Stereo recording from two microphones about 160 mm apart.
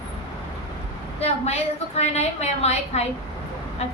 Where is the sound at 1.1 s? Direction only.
40° left (ahead or behind).